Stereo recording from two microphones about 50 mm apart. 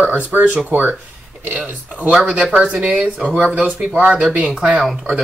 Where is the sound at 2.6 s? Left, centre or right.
Right.